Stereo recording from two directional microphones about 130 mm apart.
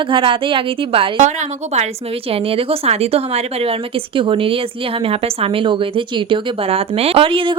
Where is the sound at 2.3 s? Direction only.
45° right (ahead or behind).